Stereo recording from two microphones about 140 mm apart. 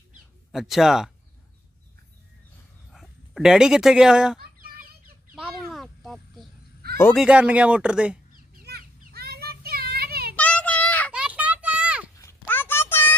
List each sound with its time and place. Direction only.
0.5 s speech: centre (ahead or behind)
2.9 s speech: centre (ahead or behind)
4.6 s fowl: 90° right
5.3 s a sound: centre (ahead or behind)
7.2 s speech: 10° right (ahead or behind)
8.7 s child singing: 90° right
10.3 s child singing: 10° left (ahead or behind)
11.1 s a sound: 10° right (ahead or behind)
12.2 s a sound: 15° left (ahead or behind)